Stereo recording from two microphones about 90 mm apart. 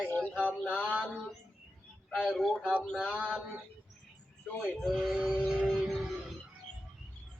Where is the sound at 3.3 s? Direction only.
15° right (ahead or behind).